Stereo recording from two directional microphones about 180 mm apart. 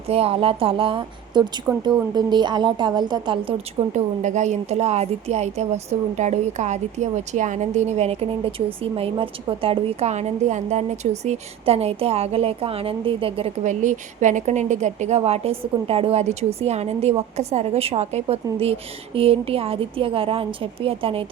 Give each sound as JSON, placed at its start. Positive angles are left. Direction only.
{"t": 0.1, "sound": "a woman's voice", "side_deg": -35}